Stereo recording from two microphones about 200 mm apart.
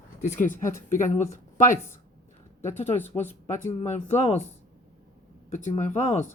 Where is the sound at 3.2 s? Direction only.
30° left (ahead or behind).